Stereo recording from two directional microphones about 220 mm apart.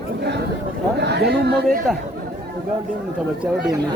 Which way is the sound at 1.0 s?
50° right (ahead or behind).